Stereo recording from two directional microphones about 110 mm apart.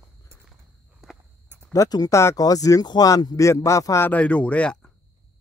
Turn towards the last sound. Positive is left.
turn(degrees=10)  # may be behind; listen again after turning